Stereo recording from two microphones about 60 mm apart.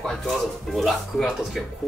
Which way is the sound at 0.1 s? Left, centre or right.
Centre.